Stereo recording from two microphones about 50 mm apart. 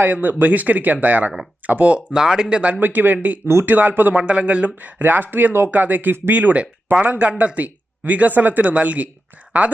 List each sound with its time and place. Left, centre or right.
0.0 s speech: right
2.0 s speech: centre
2.8 s speech: right
3.4 s speech: right
3.7 s speech: right
4.2 s speech: right